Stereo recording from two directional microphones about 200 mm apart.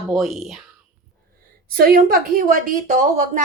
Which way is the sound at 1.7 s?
45° right (ahead or behind).